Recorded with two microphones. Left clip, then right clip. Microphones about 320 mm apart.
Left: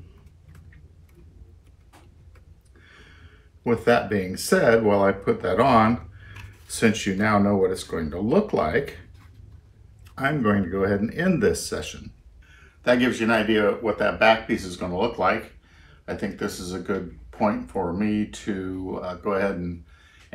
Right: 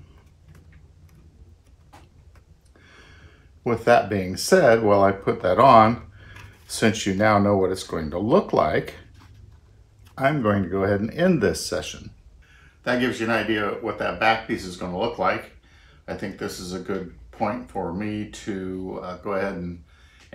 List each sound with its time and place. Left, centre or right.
2.8 s a sound: centre
3.6 s speech: centre
10.1 s speech: centre
12.8 s speech: centre